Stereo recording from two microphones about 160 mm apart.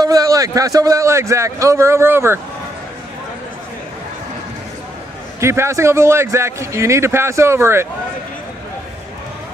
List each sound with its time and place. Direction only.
0.0 s a man's voice: 20° right (ahead or behind)
5.4 s a man's voice: 15° right (ahead or behind)